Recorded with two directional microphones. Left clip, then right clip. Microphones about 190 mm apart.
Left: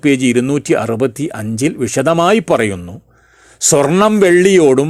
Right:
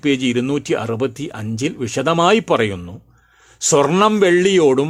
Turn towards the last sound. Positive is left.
turn(degrees=20)  # may be behind; listen again after turning